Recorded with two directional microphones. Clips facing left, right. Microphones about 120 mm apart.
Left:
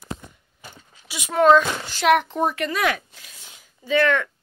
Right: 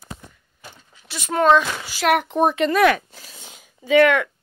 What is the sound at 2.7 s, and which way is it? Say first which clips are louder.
Speech: right 7 dB; 55° right (ahead or behind).